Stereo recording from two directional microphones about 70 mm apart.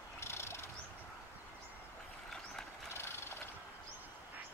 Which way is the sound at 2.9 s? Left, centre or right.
Left.